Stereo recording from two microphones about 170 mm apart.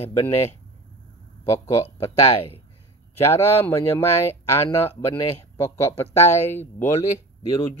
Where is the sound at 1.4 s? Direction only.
15° left (ahead or behind).